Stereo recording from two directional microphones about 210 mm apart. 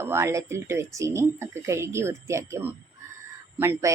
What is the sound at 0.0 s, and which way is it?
Speech, 10° right (ahead or behind).